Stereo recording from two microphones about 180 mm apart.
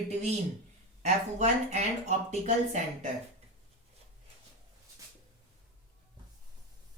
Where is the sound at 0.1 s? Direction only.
40° right (ahead or behind).